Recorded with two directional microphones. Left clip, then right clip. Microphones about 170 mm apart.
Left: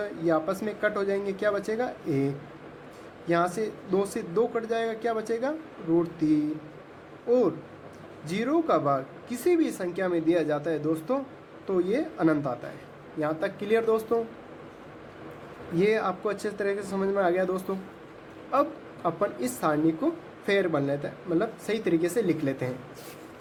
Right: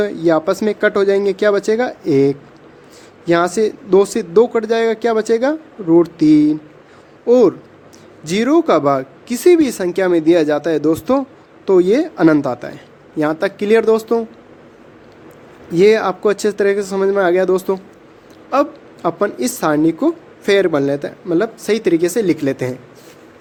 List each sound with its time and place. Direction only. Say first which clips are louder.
0.0 s a woman's voice: right 12 dB; 60° right (ahead or behind)
15.8 s a woman's voice: right 13 dB; 65° right (ahead or behind)